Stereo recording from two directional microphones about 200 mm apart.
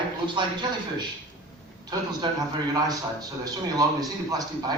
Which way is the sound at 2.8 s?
20° right (ahead or behind).